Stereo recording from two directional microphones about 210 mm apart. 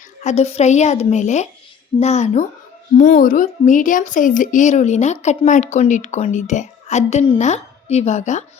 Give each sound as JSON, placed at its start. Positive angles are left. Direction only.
{"t": 0.2, "sound": "a woman's voice", "side_deg": 30}